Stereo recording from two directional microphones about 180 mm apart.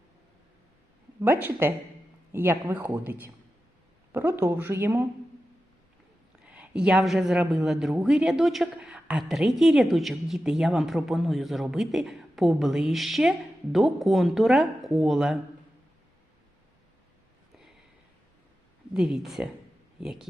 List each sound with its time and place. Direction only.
1.2 s speech: 10° right (ahead or behind)
6.4 s a woman's voice: 5° right (ahead or behind)
18.9 s a woman's voice: 5° right (ahead or behind)